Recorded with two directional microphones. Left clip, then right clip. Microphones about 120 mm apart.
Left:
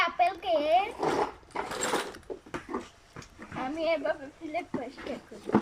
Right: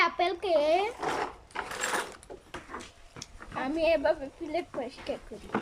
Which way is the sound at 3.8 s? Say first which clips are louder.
Right 4 dB; 40° right (ahead or behind).